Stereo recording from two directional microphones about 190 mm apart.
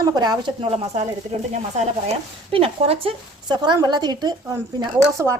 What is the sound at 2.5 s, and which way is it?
A woman's voice, 30° right (ahead or behind).